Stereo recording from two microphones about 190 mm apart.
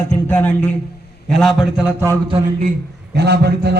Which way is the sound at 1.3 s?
Centre (ahead or behind).